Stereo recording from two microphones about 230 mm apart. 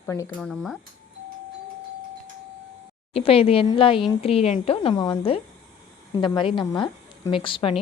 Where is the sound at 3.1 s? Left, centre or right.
Left.